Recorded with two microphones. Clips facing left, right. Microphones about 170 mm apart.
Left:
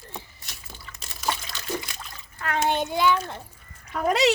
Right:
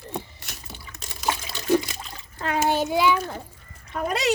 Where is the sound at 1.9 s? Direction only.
30° right (ahead or behind).